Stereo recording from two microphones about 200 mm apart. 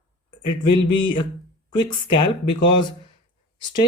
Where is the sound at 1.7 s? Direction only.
25° left (ahead or behind).